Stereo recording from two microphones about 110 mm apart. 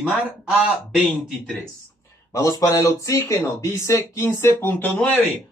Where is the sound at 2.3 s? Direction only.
30° left (ahead or behind).